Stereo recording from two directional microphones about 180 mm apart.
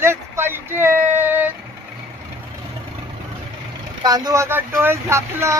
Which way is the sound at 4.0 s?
20° right (ahead or behind).